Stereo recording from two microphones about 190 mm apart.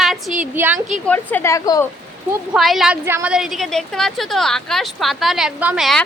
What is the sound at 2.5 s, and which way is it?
A woman's voice, centre (ahead or behind).